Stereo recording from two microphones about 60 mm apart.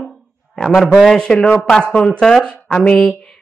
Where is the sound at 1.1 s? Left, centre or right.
Centre.